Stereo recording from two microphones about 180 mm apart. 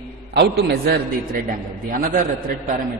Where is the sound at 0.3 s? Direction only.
70° right (ahead or behind).